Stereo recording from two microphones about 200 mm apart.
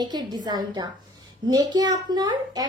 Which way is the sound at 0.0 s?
20° right (ahead or behind).